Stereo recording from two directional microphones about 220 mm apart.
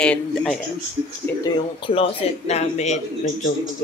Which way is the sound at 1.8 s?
25° left (ahead or behind).